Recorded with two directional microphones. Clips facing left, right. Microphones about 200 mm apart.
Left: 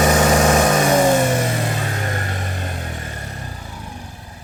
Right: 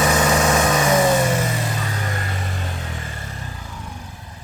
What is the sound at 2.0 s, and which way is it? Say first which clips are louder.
Vehicle: left 2 dB; 40° left (ahead or behind).